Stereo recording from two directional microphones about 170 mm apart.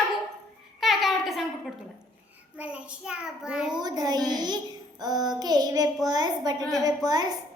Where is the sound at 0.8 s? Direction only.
Centre (ahead or behind).